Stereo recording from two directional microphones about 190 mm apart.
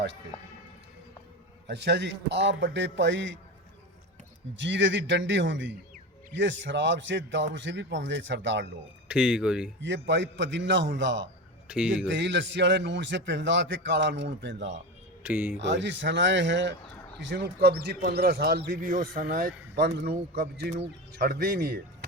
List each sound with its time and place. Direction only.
1.6 s a man's voice: 65° right (ahead or behind)
4.5 s a man's voice: 70° right (ahead or behind)
9.0 s speech: 5° right (ahead or behind)
9.8 s a man's voice: 70° right (ahead or behind)
11.7 s speech: 5° right (ahead or behind)
12.0 s a man's voice: 65° right (ahead or behind)
15.2 s speech: 10° right (ahead or behind)
15.5 s a man's voice: 65° right (ahead or behind); by 21.8 s 50° right (ahead or behind)